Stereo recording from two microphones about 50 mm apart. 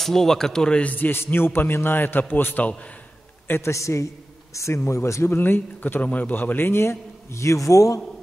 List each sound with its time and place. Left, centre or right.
0.0 s speech: centre
0.8 s a man's voice: left
1.2 s a man's voice: left
3.4 s a man's voice: left
3.7 s a man's voice: left
4.6 s speech: left
5.3 s a man's voice: left